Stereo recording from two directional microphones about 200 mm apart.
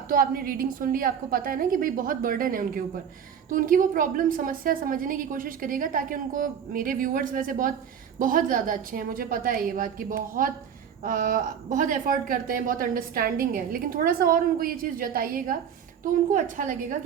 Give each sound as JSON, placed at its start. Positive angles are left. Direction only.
{"t": 0.1, "sound": "a woman's voice", "side_deg": -45}